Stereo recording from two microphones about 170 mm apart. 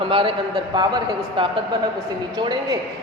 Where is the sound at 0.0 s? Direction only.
30° right (ahead or behind).